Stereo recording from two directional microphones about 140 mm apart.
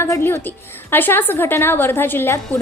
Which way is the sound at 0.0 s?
20° left (ahead or behind).